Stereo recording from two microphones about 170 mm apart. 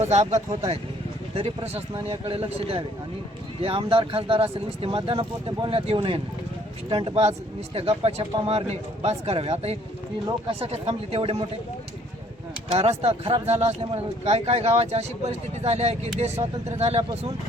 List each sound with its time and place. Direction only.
0.0 s speech: 40° right (ahead or behind)
12.6 s speech: 35° right (ahead or behind)